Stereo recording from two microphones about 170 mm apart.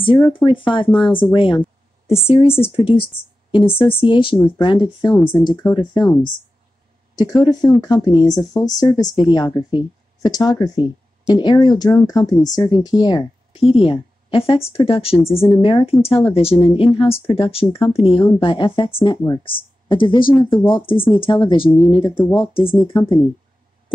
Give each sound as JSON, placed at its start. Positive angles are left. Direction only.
{"t": 0.0, "sound": "speech", "side_deg": 30}